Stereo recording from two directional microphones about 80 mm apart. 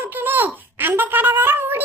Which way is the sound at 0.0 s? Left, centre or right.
Right.